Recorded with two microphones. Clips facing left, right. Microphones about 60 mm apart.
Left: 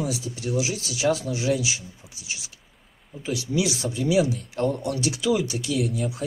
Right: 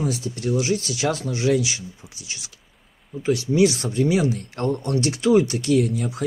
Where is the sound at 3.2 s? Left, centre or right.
Right.